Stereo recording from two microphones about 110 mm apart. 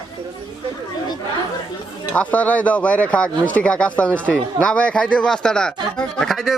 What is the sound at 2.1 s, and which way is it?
Speech, 10° left (ahead or behind).